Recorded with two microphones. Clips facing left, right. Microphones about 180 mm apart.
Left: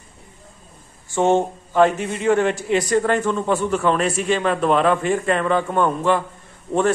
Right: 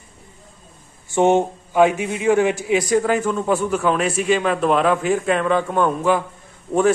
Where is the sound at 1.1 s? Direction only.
15° right (ahead or behind).